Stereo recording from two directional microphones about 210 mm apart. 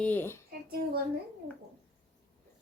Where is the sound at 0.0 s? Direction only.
10° left (ahead or behind).